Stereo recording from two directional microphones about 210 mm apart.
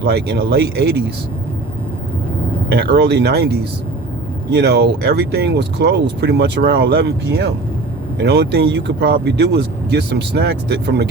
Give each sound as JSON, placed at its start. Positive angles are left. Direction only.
{"t": 0.0, "sound": "speech", "side_deg": -50}
{"t": 2.6, "sound": "speech", "side_deg": -50}